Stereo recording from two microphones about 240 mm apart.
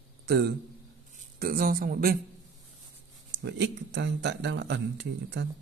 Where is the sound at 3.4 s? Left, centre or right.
Right.